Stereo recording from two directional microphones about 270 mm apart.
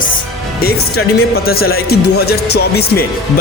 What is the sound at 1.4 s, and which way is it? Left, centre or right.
Speech, left.